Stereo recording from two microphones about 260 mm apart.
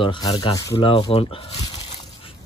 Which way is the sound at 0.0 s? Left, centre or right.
Centre.